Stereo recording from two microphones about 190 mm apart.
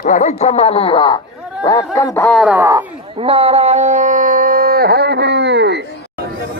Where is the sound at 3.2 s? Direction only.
30° right (ahead or behind); by 6.2 s 65° right (ahead or behind).